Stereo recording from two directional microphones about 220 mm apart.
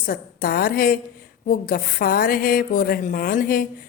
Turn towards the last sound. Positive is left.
turn(degrees=40)  # may be behind; listen again after turning